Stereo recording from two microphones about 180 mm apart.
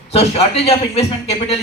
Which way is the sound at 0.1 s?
35° left (ahead or behind).